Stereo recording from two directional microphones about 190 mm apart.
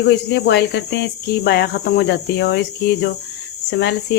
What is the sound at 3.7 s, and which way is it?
Speech, 65° left (ahead or behind).